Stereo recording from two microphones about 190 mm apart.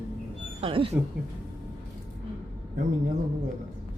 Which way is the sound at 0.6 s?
30° right (ahead or behind).